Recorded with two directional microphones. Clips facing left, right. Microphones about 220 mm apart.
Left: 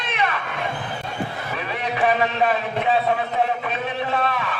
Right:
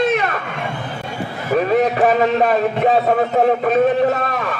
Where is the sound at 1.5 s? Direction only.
45° right (ahead or behind).